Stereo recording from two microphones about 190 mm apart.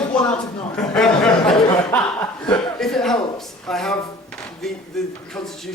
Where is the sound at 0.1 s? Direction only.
5° left (ahead or behind).